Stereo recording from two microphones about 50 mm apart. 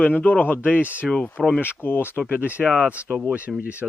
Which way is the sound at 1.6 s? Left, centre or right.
Left.